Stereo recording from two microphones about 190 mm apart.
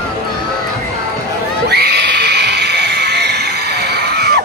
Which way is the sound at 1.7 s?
55° right (ahead or behind).